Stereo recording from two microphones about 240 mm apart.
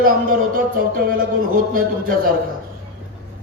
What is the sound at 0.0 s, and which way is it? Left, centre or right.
A man's voice, right.